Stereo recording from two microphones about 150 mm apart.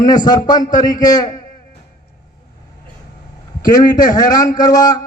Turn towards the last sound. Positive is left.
turn(degrees=25)  # may be behind; listen again after turning